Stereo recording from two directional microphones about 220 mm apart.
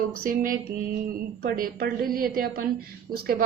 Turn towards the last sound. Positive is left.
turn(degrees=-45)  # may be behind; listen again after turning